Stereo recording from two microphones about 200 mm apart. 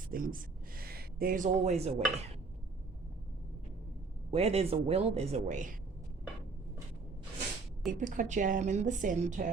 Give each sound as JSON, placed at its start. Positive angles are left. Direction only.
{"t": 0.1, "sound": "a sound", "side_deg": -45}
{"t": 4.3, "sound": "a woman's voice", "side_deg": -30}
{"t": 7.9, "sound": "a woman's voice", "side_deg": -40}